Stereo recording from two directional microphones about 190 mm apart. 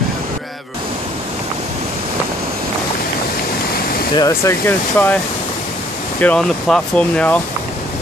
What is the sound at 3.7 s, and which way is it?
Waterfall, 50° left (ahead or behind).